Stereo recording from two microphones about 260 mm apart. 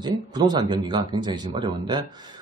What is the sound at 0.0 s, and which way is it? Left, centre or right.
A man's voice, centre.